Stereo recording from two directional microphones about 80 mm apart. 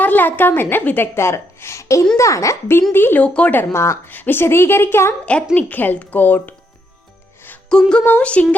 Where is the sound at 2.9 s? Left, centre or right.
Left.